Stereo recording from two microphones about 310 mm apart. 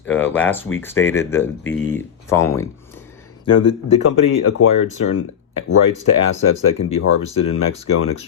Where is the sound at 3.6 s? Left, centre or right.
Left.